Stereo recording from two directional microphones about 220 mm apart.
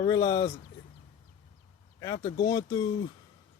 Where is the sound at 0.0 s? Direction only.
20° left (ahead or behind).